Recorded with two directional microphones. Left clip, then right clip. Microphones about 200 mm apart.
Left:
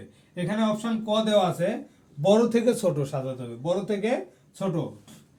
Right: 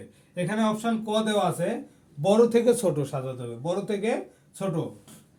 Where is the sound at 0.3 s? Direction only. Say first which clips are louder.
Even; 15° right (ahead or behind).